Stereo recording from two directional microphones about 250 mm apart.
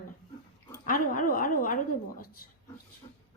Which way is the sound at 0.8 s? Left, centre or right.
Left.